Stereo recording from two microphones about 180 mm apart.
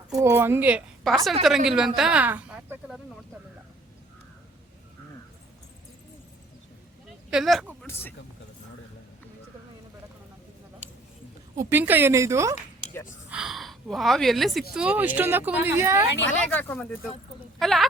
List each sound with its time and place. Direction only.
0.2 s speech: 15° right (ahead or behind)
1.0 s a woman's voice: centre (ahead or behind)
2.0 s a sound: 5° right (ahead or behind)
7.3 s speech: centre (ahead or behind)
7.8 s speech: 10° left (ahead or behind)
11.5 s speech: 15° right (ahead or behind)
13.3 s speech: centre (ahead or behind)
16.2 s a woman's voice: 10° left (ahead or behind)